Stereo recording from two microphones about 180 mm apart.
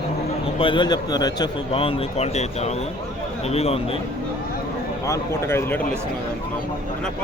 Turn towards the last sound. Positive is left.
turn(degrees=15)  # may be behind; listen again after turning